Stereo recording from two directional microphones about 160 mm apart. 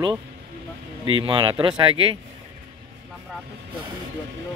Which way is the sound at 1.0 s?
35° right (ahead or behind).